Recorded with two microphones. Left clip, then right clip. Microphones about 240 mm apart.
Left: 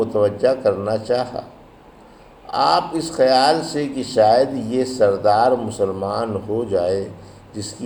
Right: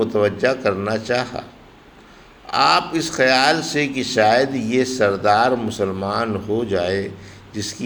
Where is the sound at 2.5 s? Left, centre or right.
Right.